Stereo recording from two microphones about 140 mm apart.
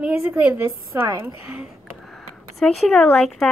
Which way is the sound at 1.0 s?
25° right (ahead or behind).